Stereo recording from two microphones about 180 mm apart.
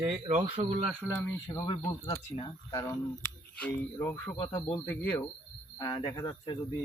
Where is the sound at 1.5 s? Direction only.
20° left (ahead or behind).